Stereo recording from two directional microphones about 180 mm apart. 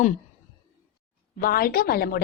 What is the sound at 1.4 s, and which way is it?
Speech, 55° left (ahead or behind).